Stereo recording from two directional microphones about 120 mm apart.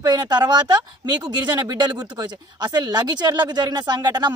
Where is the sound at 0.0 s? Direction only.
30° right (ahead or behind).